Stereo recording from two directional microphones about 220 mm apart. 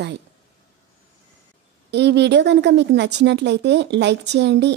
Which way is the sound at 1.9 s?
50° right (ahead or behind).